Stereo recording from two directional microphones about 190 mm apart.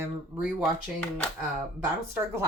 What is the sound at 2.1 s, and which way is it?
Speech, 15° right (ahead or behind).